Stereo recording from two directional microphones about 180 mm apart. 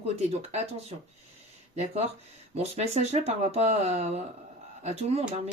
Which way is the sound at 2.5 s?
35° right (ahead or behind).